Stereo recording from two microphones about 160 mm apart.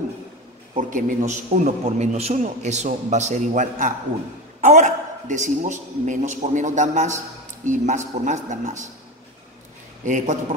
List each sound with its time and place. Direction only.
0.7 s a man's voice: 55° right (ahead or behind)
10.0 s a man's voice: 50° right (ahead or behind)